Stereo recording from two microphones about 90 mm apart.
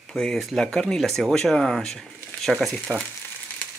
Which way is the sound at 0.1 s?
10° left (ahead or behind).